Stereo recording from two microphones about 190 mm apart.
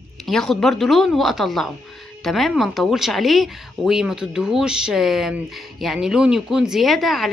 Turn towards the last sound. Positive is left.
turn(degrees=0)  # may be behind; listen again after turning